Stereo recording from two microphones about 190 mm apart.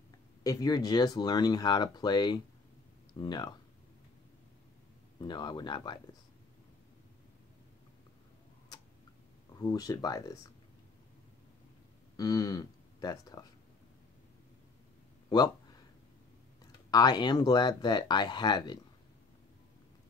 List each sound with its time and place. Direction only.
0.4 s speech: 20° left (ahead or behind)
5.2 s speech: 25° left (ahead or behind)
9.5 s speech: 20° left (ahead or behind)
12.2 s speech: 20° left (ahead or behind)
15.2 s speech: 20° left (ahead or behind)
16.9 s speech: 20° left (ahead or behind)